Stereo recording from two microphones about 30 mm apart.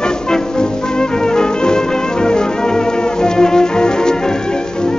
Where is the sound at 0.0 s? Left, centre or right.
Left.